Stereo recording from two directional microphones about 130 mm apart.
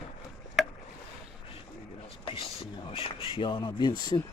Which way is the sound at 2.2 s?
45° left (ahead or behind).